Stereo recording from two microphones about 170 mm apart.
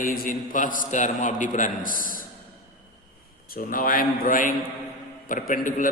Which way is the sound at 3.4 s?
60° left (ahead or behind).